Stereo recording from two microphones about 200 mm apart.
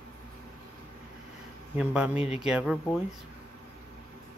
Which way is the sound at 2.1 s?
30° left (ahead or behind).